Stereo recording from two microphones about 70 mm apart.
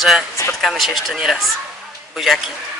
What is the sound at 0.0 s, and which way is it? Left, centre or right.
Speech, centre.